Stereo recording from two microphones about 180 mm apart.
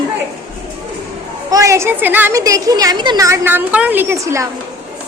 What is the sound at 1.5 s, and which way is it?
A woman's voice, 15° right (ahead or behind).